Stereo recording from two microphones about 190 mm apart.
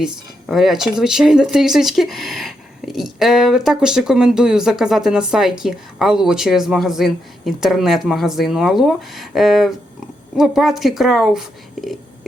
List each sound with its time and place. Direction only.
0.0 s speech: centre (ahead or behind)